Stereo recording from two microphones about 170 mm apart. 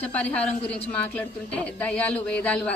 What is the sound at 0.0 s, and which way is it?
Speech, 10° left (ahead or behind).